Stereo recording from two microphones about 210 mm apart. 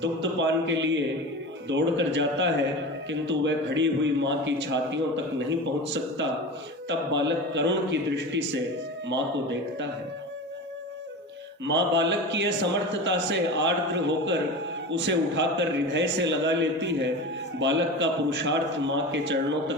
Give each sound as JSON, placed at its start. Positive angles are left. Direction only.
{"t": 0.0, "sound": "a man's voice", "side_deg": -60}
{"t": 11.6, "sound": "a man's voice", "side_deg": -60}